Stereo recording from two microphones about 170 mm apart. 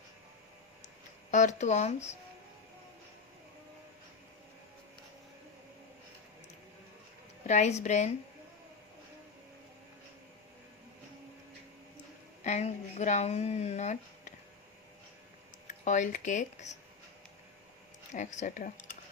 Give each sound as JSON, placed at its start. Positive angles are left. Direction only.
{"t": 1.3, "sound": "speech", "side_deg": 45}
{"t": 7.4, "sound": "speech", "side_deg": 45}
{"t": 12.4, "sound": "speech", "side_deg": 40}
{"t": 15.6, "sound": "speech", "side_deg": 45}
{"t": 18.1, "sound": "speech", "side_deg": 45}